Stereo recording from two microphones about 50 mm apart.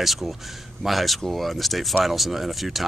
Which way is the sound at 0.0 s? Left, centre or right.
Centre.